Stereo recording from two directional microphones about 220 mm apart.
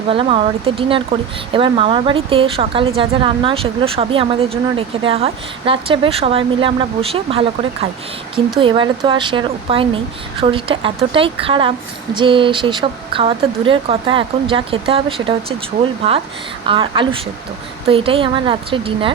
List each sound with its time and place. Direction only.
0.1 s speech: 25° right (ahead or behind)